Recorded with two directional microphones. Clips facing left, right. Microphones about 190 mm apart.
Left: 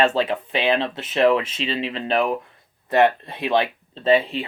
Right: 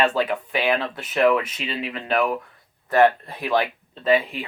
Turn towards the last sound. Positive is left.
turn(degrees=25)  # may be behind; listen again after turning